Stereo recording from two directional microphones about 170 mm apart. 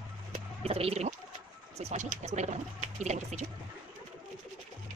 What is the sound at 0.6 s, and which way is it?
Speech, 35° right (ahead or behind).